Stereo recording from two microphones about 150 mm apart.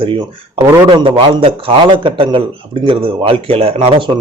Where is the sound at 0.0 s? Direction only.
35° right (ahead or behind).